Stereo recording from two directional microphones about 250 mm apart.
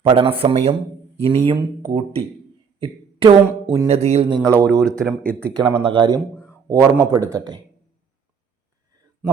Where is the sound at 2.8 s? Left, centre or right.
Centre.